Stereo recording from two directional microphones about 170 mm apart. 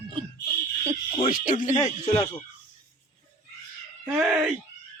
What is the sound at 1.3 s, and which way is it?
Speech, 55° left (ahead or behind).